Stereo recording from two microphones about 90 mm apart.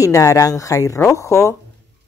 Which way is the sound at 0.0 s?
40° left (ahead or behind).